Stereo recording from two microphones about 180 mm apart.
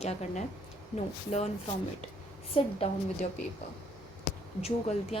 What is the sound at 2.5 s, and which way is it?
Speech, 35° left (ahead or behind).